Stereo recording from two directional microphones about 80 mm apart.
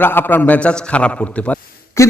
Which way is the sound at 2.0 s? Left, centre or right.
Left.